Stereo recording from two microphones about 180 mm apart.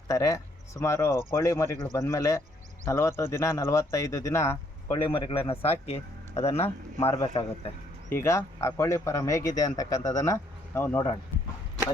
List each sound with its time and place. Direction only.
0.1 s speech: 20° left (ahead or behind)
5.0 s a man's voice: 30° left (ahead or behind)
8.2 s speech: 15° left (ahead or behind)